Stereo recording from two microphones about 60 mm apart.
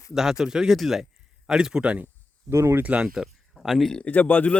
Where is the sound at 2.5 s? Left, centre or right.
Right.